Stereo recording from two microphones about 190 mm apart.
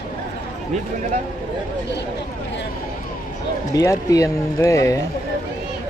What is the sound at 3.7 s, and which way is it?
Speech, 20° left (ahead or behind).